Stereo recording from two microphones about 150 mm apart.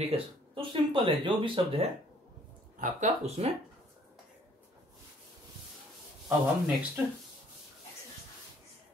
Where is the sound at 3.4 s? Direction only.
45° right (ahead or behind).